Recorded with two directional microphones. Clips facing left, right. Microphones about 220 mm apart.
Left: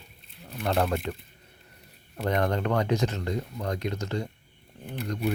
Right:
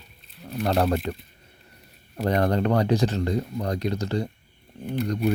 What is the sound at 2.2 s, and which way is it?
Speech, 35° right (ahead or behind).